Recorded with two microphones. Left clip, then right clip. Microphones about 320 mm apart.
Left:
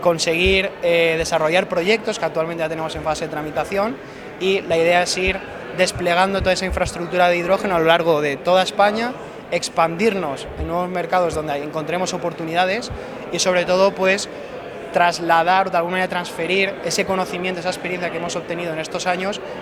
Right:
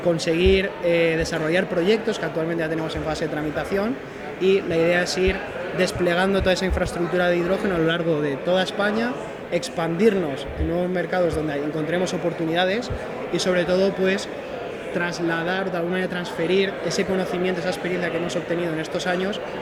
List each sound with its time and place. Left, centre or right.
0.2 s speech: left
4.4 s a man's voice: left
13.3 s a man's voice: left